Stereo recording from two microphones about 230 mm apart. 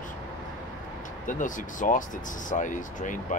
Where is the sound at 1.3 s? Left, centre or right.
Left.